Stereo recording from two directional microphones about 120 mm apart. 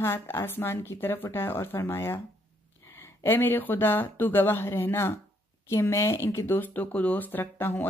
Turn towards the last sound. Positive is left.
turn(degrees=15)  # may be behind; listen again after turning